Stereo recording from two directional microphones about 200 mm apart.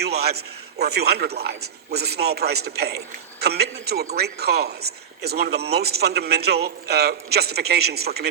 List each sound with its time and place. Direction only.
0.0 s a man's voice: 55° right (ahead or behind)